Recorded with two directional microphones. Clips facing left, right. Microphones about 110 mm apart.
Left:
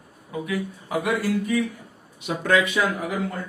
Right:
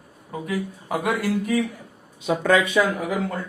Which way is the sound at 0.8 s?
55° right (ahead or behind).